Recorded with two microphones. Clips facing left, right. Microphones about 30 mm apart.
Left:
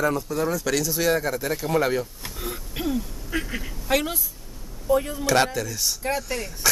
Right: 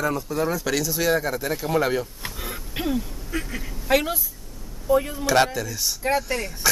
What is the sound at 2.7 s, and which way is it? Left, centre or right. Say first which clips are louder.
Throat clearing: right 1 dB; centre.